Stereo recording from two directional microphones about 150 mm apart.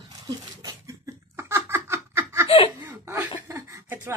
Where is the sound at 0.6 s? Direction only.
25° right (ahead or behind).